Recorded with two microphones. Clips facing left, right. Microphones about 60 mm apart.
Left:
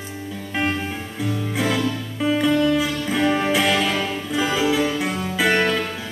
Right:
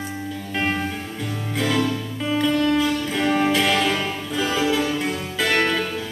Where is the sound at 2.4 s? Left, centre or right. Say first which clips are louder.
Even; centre.